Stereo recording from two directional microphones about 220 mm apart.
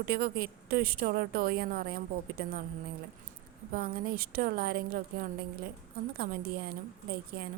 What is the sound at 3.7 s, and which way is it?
A woman's voice, 40° right (ahead or behind).